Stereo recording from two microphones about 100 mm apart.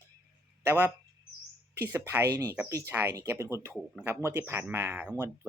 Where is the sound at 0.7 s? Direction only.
20° right (ahead or behind).